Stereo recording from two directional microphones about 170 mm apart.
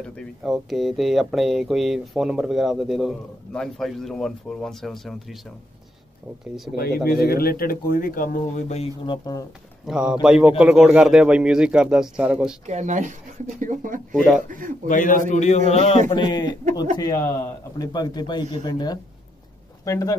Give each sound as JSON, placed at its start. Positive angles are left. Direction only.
{"t": 0.0, "sound": "speech", "side_deg": 0}
{"t": 7.1, "sound": "speech", "side_deg": 65}
{"t": 9.0, "sound": "a man's voice", "side_deg": 25}
{"t": 9.8, "sound": "speech", "side_deg": -5}
{"t": 12.6, "sound": "speech", "side_deg": -45}
{"t": 14.1, "sound": "speech", "side_deg": 5}
{"t": 14.9, "sound": "a man's voice", "side_deg": 50}
{"t": 16.1, "sound": "a man's voice", "side_deg": 25}